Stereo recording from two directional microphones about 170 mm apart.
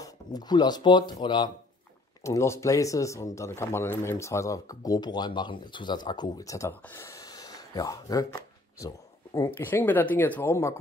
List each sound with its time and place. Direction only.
0.0 s speech: 25° left (ahead or behind)